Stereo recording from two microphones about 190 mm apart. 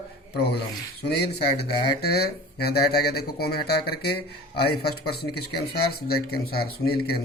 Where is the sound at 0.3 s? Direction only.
60° left (ahead or behind).